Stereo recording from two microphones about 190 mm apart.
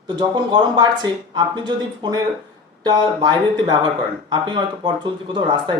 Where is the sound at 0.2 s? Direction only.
25° right (ahead or behind).